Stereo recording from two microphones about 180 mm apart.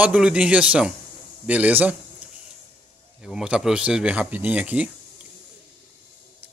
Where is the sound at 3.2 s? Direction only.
5° right (ahead or behind).